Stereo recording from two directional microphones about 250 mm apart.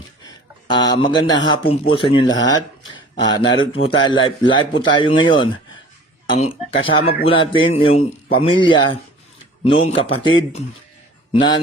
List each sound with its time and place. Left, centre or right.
0.3 s speech: centre